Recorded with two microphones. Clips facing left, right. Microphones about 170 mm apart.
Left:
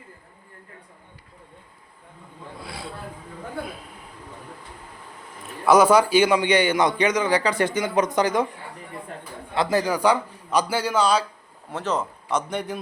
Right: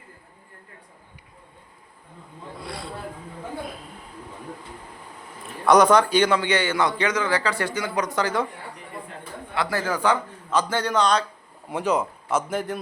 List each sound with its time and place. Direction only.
2.6 s a sound: centre (ahead or behind)
5.6 s a man's voice: 5° left (ahead or behind)
9.6 s a man's voice: 20° left (ahead or behind)
11.7 s speech: 10° right (ahead or behind)